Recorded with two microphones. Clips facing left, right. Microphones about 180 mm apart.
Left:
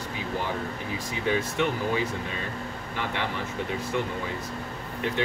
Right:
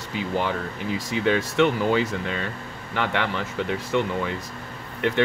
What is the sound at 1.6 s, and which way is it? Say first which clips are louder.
Speech: right 6 dB; 75° right (ahead or behind).